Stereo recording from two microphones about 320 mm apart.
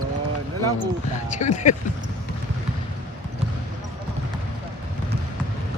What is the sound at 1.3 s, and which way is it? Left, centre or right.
Speech, left.